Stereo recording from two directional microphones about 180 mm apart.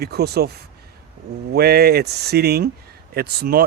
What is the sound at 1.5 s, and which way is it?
Speech, 60° right (ahead or behind).